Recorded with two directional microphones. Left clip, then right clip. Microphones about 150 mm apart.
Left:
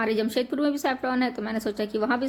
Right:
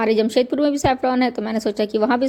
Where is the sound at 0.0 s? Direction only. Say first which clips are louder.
Right 8 dB; 40° right (ahead or behind).